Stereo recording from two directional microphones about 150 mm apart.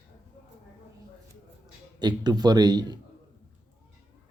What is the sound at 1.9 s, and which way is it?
Speech, 30° right (ahead or behind).